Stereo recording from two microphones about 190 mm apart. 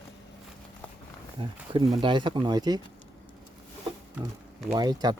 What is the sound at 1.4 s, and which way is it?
Speech, 25° right (ahead or behind).